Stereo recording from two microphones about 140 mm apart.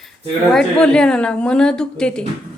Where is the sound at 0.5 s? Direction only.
5° left (ahead or behind).